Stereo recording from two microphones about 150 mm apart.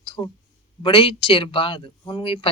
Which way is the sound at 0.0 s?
35° left (ahead or behind).